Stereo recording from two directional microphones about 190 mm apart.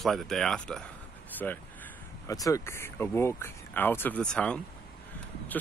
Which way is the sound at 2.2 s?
20° left (ahead or behind).